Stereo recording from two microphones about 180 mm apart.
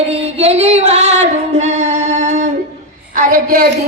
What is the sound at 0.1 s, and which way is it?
Singing, 35° right (ahead or behind).